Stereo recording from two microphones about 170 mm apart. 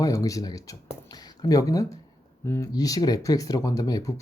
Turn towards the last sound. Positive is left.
turn(degrees=20)  # may be behind; listen again after turning